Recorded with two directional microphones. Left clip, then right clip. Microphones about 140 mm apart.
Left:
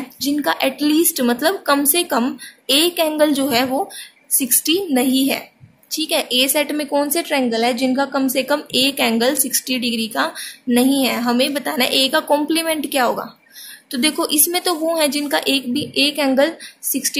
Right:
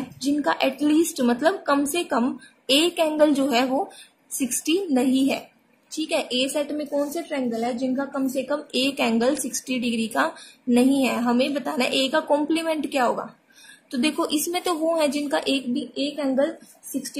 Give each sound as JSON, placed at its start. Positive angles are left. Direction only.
{"t": 0.2, "sound": "a woman's voice", "side_deg": 0}
{"t": 6.8, "sound": "a woman's voice", "side_deg": 25}
{"t": 8.7, "sound": "a woman's voice", "side_deg": 0}
{"t": 15.7, "sound": "a woman's voice", "side_deg": 15}